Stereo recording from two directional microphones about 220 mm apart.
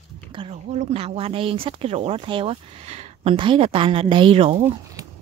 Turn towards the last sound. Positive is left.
turn(degrees=-25)  # may be behind; listen again after turning